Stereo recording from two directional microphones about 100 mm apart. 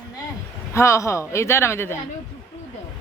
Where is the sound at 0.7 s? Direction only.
30° left (ahead or behind).